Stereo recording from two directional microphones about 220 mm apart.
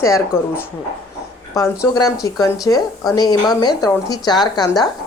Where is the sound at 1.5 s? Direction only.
15° left (ahead or behind).